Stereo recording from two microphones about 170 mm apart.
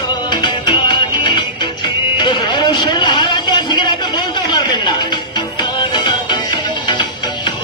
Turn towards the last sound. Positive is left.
turn(degrees=25)  # may be behind; listen again after turning